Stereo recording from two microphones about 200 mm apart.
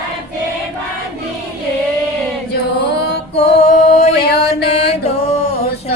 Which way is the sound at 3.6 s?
35° left (ahead or behind).